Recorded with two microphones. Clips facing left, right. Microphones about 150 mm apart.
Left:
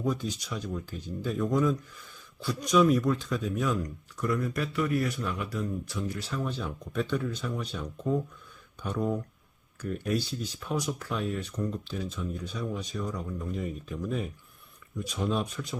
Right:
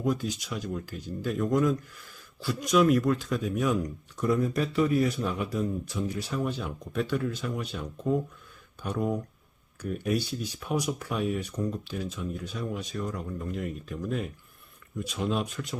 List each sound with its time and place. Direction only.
0.0 s a man's voice: 10° right (ahead or behind)